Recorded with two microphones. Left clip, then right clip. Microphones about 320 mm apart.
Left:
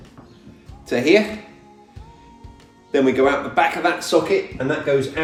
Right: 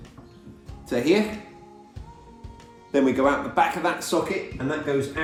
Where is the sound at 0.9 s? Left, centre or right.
Centre.